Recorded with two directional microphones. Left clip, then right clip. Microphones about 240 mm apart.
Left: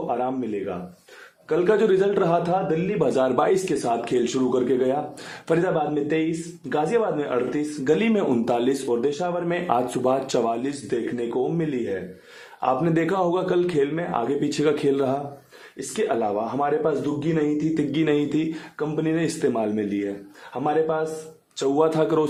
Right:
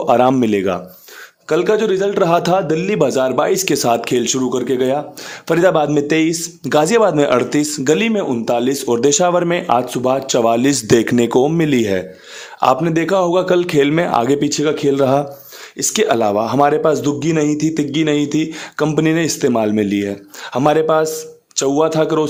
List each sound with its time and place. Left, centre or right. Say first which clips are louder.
0.1 s speech: right 15 dB; right
1.6 s a man's voice: right 2 dB; right
2.4 s speech: right 7 dB; right
3.0 s speech: right 5 dB; right
5.7 s speech: right 9 dB; right
8.9 s speech: right 10 dB; right
12.8 s speech: right 7 dB; right
14.4 s a man's voice: right 6 dB; right
15.9 s speech: right 9 dB; right
18.8 s speech: right 9 dB; right
21.6 s a man's voice: right 6 dB; right